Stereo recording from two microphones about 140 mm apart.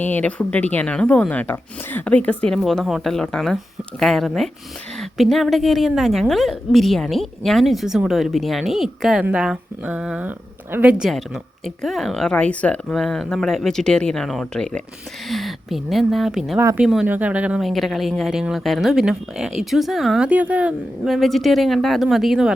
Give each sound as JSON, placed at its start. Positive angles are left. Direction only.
{"t": 0.0, "sound": "a woman's voice", "side_deg": 10}
{"t": 16.6, "sound": "speech", "side_deg": -15}
{"t": 16.8, "sound": "speech", "side_deg": -5}